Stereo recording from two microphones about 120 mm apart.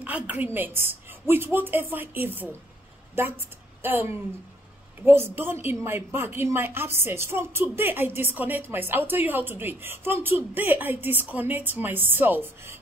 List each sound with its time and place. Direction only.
0.0 s a woman's voice: 15° right (ahead or behind)